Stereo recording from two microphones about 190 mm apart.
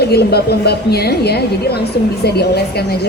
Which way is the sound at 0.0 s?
60° left (ahead or behind).